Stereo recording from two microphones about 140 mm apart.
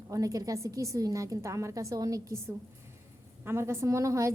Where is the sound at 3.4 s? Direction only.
20° right (ahead or behind).